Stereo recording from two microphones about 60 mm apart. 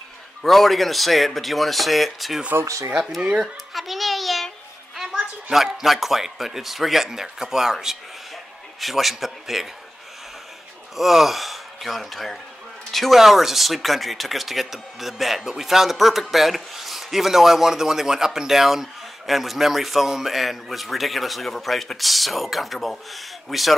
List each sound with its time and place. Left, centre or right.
0.4 s speech: centre
2.6 s speech: right
3.2 s a child's voice: centre
3.7 s a sound: centre
4.9 s a man's voice: centre
11.0 s speech: centre